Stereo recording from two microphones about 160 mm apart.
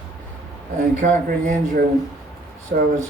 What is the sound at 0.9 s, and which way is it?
Speech, 50° right (ahead or behind).